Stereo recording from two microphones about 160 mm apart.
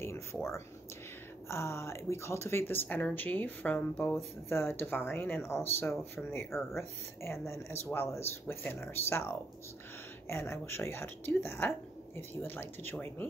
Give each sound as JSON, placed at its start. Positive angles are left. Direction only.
{"t": 0.0, "sound": "a sound", "side_deg": 15}
{"t": 1.5, "sound": "speech", "side_deg": 15}
{"t": 10.2, "sound": "speech", "side_deg": 15}